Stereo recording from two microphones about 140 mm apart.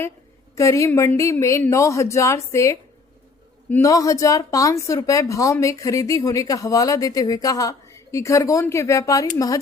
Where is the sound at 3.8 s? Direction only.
25° left (ahead or behind).